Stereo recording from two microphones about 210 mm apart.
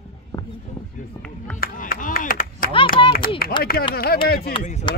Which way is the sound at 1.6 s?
40° left (ahead or behind).